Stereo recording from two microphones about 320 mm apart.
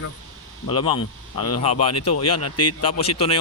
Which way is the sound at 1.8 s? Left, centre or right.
Left.